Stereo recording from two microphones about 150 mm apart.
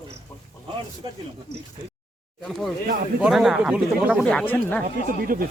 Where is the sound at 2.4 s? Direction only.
Centre (ahead or behind).